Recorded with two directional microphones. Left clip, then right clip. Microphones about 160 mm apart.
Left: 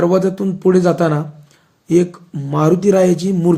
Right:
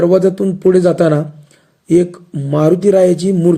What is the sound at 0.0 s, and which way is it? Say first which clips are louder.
Speech: right 4 dB; 20° right (ahead or behind).